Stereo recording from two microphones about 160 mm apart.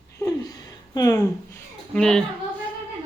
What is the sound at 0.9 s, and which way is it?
Speech, 20° left (ahead or behind).